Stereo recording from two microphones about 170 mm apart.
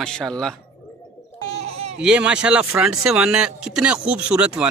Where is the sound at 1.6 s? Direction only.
35° right (ahead or behind).